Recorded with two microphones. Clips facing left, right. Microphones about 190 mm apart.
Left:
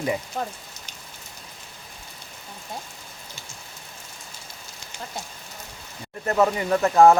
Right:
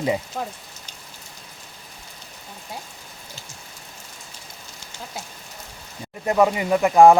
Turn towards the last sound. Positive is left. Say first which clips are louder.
# right 2 dB
turn(degrees=-15)  # may be behind; listen again after turning